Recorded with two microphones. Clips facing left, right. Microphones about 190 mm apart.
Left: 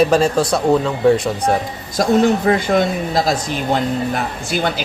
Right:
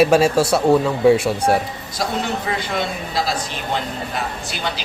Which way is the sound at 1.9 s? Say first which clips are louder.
Left 10 dB; 50° left (ahead or behind).